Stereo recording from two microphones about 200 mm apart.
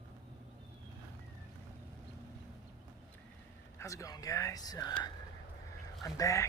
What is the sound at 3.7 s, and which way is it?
Speech, 15° left (ahead or behind).